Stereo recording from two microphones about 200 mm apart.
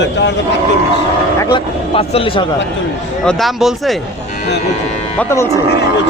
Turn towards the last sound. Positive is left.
turn(degrees=15)  # may be behind; listen again after turning